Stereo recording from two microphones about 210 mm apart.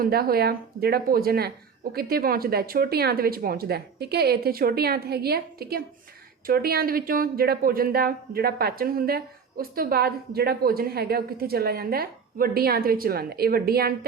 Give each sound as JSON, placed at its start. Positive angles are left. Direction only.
{"t": 0.0, "sound": "a woman's voice", "side_deg": -45}